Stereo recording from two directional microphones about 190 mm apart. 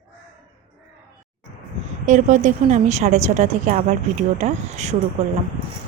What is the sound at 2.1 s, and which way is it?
A woman's voice, 40° right (ahead or behind).